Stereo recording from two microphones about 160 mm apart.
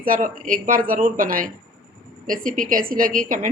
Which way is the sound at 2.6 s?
60° right (ahead or behind).